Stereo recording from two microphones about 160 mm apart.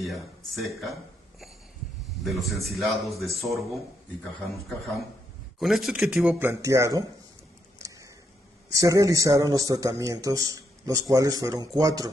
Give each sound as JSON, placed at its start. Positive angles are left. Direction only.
{"t": 0.0, "sound": "speech", "side_deg": 0}
{"t": 2.2, "sound": "speech", "side_deg": 0}
{"t": 6.6, "sound": "a man's voice", "side_deg": -20}
{"t": 8.7, "sound": "a man's voice", "side_deg": -20}